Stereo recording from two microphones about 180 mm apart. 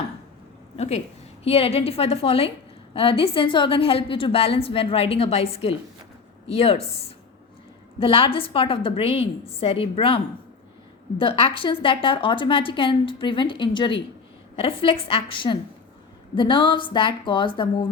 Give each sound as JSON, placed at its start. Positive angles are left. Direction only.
{"t": 0.8, "sound": "a woman's voice", "side_deg": 35}
{"t": 11.2, "sound": "a woman's voice", "side_deg": 30}